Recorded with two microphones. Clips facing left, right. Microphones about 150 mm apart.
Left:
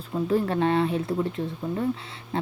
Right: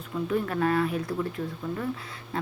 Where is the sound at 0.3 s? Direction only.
30° left (ahead or behind).